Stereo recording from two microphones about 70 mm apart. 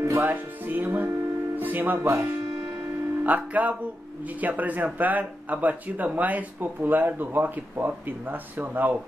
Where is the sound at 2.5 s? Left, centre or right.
Centre.